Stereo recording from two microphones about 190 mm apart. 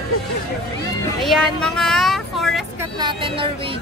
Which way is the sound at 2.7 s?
20° right (ahead or behind).